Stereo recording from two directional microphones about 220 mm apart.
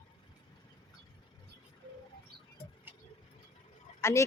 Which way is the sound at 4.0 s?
10° left (ahead or behind).